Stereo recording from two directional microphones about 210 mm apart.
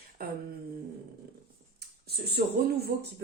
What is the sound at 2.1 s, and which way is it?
Speech, 50° right (ahead or behind).